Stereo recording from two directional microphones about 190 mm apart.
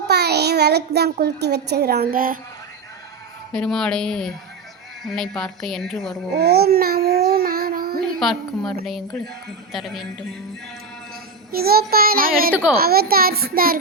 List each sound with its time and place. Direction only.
0.1 s a child's voice: 60° right (ahead or behind)
3.5 s a woman's voice: 5° left (ahead or behind)
6.3 s child singing: 55° right (ahead or behind)
8.2 s a woman's voice: centre (ahead or behind)
11.5 s a child's voice: 55° right (ahead or behind)